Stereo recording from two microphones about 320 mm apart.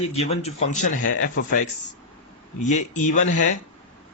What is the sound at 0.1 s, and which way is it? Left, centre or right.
A man's voice, centre.